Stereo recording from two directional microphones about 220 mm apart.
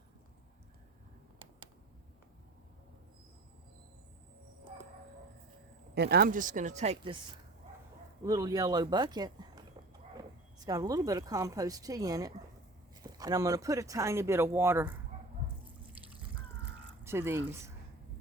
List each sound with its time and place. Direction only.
5.9 s speech: 45° right (ahead or behind); by 7.2 s 25° right (ahead or behind)
8.2 s speech: 15° right (ahead or behind)
10.7 s speech: 15° right (ahead or behind)
17.0 s speech: 10° right (ahead or behind)